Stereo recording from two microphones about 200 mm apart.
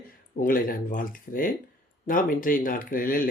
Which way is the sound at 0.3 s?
45° left (ahead or behind).